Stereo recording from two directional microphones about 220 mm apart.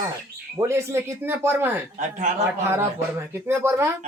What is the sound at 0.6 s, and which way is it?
Speech, 10° right (ahead or behind).